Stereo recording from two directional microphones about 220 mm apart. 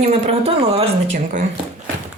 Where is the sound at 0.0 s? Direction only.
25° right (ahead or behind).